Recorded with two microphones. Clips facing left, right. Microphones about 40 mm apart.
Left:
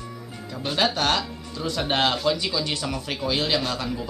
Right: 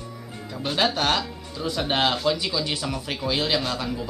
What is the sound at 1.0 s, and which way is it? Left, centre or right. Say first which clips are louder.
Speech: even; centre.